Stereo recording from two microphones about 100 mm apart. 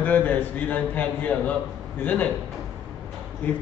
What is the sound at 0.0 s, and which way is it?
A man's voice, 15° left (ahead or behind).